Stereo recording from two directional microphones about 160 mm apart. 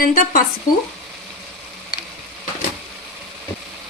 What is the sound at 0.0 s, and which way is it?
Speech, 65° left (ahead or behind).